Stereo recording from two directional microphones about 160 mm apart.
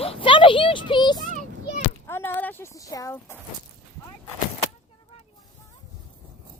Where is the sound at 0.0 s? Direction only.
35° left (ahead or behind).